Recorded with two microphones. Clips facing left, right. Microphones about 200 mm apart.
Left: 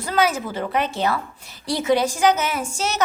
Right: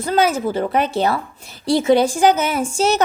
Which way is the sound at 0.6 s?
35° right (ahead or behind).